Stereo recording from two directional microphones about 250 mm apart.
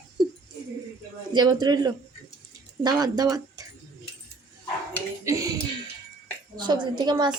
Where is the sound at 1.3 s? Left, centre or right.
Centre.